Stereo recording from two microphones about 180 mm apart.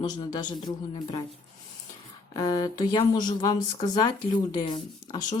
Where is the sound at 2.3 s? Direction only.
20° left (ahead or behind).